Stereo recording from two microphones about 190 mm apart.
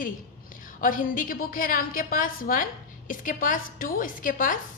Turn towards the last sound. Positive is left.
turn(degrees=45)  # may be behind; listen again after turning